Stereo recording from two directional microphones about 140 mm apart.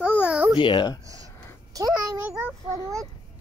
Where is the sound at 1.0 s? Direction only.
25° right (ahead or behind).